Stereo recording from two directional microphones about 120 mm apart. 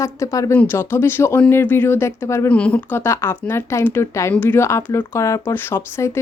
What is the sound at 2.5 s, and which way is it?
Speech, 10° left (ahead or behind).